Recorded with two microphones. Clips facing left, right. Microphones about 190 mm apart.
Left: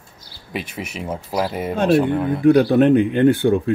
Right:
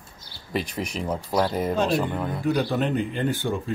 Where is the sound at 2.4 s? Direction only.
60° left (ahead or behind).